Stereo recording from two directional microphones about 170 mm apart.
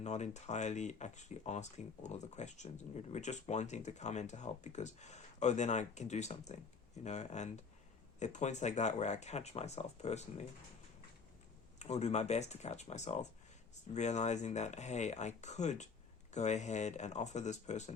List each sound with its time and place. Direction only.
0.0 s speech: 40° left (ahead or behind)
11.8 s speech: 40° left (ahead or behind)